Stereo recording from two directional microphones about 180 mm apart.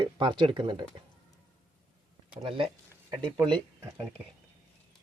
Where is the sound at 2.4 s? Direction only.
30° right (ahead or behind).